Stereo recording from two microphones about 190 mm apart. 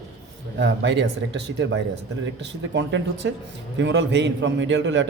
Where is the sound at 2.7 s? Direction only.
70° right (ahead or behind).